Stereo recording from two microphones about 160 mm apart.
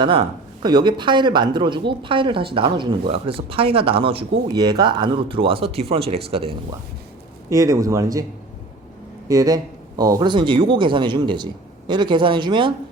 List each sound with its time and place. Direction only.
0.0 s speech: 30° right (ahead or behind)
7.5 s speech: 20° right (ahead or behind)
9.3 s speech: 20° right (ahead or behind)